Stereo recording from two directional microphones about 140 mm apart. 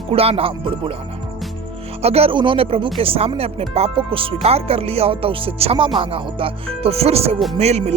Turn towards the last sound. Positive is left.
turn(degrees=-50)  # may be behind; listen again after turning